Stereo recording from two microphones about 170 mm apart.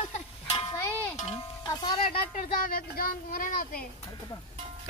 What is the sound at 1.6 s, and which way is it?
Music, 25° left (ahead or behind).